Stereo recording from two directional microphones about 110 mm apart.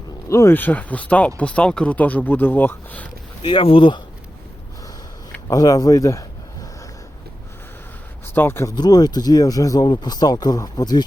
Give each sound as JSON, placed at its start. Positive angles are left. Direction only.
{"t": 0.3, "sound": "speech", "side_deg": 25}
{"t": 3.4, "sound": "speech", "side_deg": 50}
{"t": 5.5, "sound": "speech", "side_deg": 35}
{"t": 8.4, "sound": "speech", "side_deg": 20}
{"t": 8.7, "sound": "speech", "side_deg": 35}